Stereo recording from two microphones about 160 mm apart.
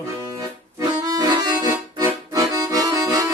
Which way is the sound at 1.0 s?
25° right (ahead or behind).